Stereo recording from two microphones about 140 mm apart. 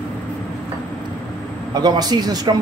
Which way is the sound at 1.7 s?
30° right (ahead or behind).